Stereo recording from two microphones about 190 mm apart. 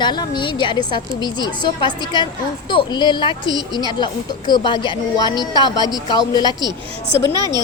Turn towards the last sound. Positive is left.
turn(degrees=-20)  # may be behind; listen again after turning